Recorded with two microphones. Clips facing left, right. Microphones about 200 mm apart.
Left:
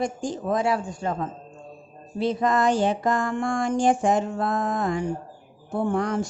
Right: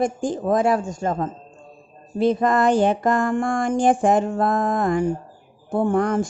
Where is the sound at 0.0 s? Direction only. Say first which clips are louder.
Right 5 dB; 50° right (ahead or behind).